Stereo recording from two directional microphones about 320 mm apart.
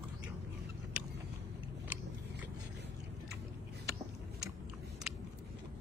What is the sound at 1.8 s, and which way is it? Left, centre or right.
Biting, centre.